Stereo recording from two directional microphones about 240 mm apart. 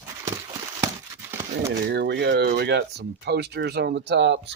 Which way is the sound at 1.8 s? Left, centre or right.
Right.